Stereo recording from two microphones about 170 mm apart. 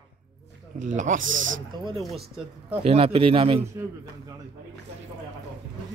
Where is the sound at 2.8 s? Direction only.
35° right (ahead or behind).